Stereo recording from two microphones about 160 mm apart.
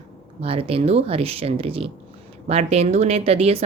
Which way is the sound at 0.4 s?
35° right (ahead or behind).